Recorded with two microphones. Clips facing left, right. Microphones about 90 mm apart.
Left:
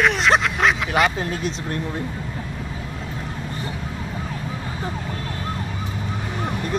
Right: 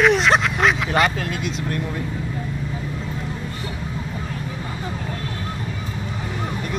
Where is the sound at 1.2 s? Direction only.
30° left (ahead or behind).